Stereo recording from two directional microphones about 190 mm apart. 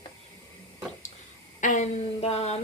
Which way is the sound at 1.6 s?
40° left (ahead or behind).